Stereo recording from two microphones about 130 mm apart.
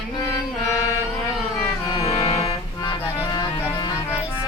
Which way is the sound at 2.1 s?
45° left (ahead or behind).